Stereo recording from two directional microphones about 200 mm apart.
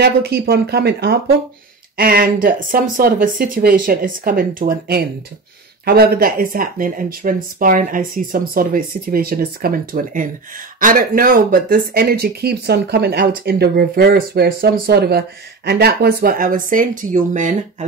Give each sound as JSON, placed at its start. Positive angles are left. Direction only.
{"t": 0.0, "sound": "speech", "side_deg": -55}